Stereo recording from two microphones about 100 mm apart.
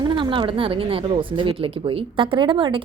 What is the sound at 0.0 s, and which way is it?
A woman's voice, 55° right (ahead or behind).